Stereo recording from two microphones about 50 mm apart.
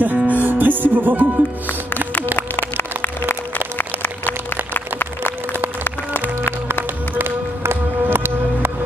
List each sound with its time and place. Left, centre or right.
0.0 s music: right
2.3 s music: left
3.5 s a sound: left
7.2 s music: right